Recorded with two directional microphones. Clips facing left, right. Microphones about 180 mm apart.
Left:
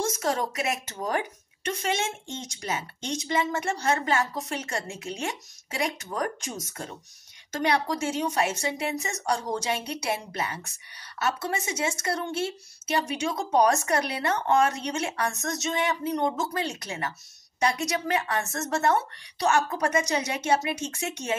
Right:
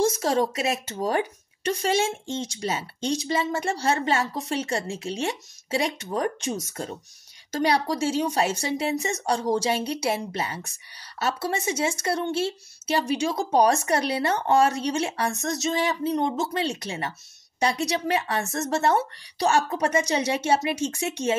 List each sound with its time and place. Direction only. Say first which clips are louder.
0.0 s a woman's voice: right 5 dB; 30° right (ahead or behind)